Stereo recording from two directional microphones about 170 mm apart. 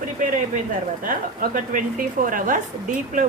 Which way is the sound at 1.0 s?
55° right (ahead or behind).